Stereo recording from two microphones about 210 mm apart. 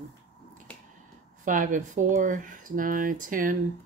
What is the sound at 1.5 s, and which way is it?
Speech, 40° right (ahead or behind).